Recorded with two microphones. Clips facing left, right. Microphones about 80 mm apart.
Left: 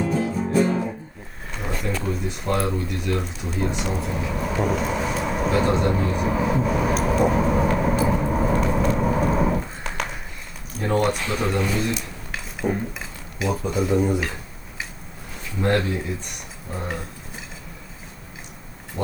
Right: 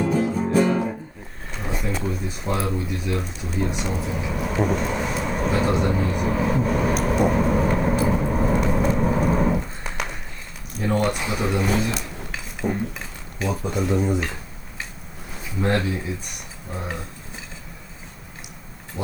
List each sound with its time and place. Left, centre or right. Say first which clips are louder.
0.0 s music: right 2 dB; right
1.7 s a sound: even; centre
2.0 s speech: left 2 dB; centre
8.3 s vehicle: even; centre
8.6 s a sound: even; centre
10.8 s a sound: left 1 dB; left
11.2 s speech: even; centre
11.9 s dishes: right 1 dB; centre
13.6 s speech: left 2 dB; centre
16.7 s speech: left 1 dB; centre
19.0 s speech: left 2 dB; centre